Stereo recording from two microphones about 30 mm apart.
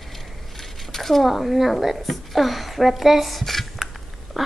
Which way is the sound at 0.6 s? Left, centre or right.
Centre.